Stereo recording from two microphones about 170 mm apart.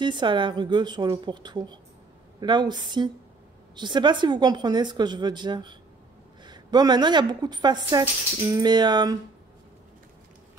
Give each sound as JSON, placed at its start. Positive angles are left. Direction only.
{"t": 0.0, "sound": "a woman's voice", "side_deg": -25}